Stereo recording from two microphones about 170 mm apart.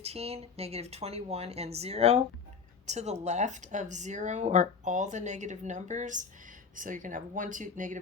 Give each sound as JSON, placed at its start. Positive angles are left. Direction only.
{"t": 0.0, "sound": "speech", "side_deg": -35}